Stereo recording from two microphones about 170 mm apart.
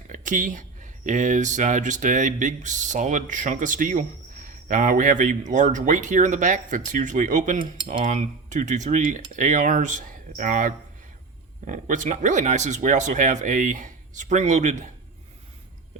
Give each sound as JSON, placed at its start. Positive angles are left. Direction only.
{"t": 0.1, "sound": "speech", "side_deg": -50}